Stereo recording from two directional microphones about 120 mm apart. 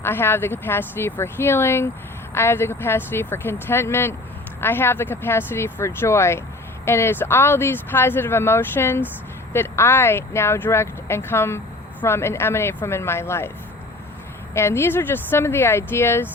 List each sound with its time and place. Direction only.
0.0 s speech: 20° left (ahead or behind)
14.5 s speech: 20° left (ahead or behind)